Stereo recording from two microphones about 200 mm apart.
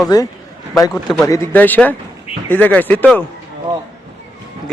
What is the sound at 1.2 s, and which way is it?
Speech, 15° left (ahead or behind).